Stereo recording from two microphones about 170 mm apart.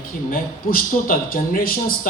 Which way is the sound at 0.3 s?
60° left (ahead or behind).